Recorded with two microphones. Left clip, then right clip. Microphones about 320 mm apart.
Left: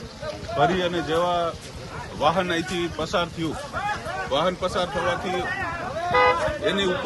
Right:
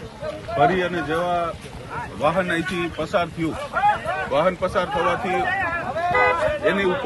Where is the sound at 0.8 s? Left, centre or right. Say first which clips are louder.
Even; centre.